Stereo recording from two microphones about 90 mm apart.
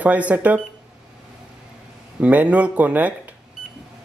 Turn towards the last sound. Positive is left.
turn(degrees=-15)  # may be behind; listen again after turning